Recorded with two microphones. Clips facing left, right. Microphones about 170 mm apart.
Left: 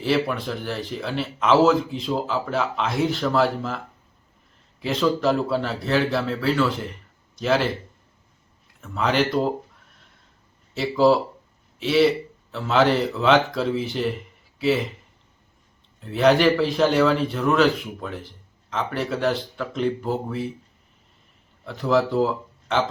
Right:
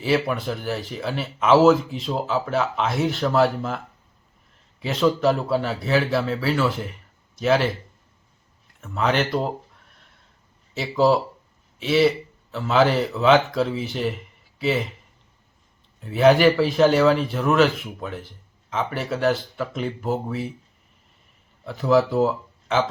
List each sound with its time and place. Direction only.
0.0 s speech: centre (ahead or behind)
4.8 s speech: centre (ahead or behind)
8.8 s speech: centre (ahead or behind)
10.8 s speech: centre (ahead or behind)
16.0 s speech: 5° right (ahead or behind)
21.6 s speech: 5° right (ahead or behind)